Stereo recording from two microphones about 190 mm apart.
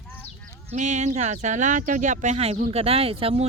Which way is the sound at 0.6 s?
40° right (ahead or behind).